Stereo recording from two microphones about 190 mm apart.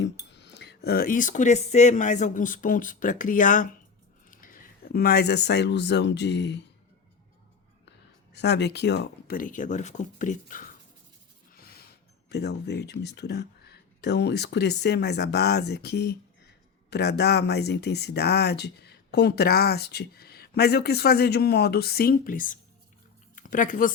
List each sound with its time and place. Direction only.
0.0 s speech: 65° left (ahead or behind)
7.9 s speech: 65° left (ahead or behind); by 10.8 s 45° left (ahead or behind)
12.3 s speech: 60° left (ahead or behind); by 23.9 s 45° left (ahead or behind)